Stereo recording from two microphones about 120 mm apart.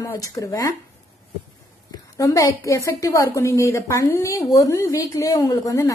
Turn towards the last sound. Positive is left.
turn(degrees=30)  # may be behind; listen again after turning